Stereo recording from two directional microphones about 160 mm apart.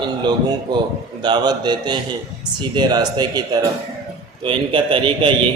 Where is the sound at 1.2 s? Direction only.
25° right (ahead or behind).